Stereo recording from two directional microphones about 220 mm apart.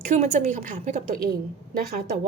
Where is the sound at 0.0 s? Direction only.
35° right (ahead or behind).